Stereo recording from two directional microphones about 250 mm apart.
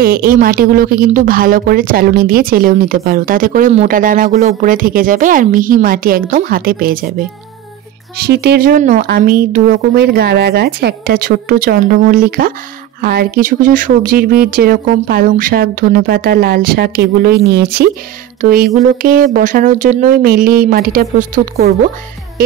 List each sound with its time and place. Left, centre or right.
0.0 s speech: right
8.2 s speech: right